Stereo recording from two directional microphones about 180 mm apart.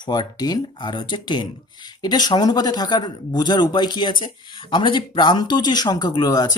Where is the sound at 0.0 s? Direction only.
25° left (ahead or behind).